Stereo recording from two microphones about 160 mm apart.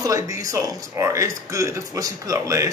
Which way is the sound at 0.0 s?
20° right (ahead or behind).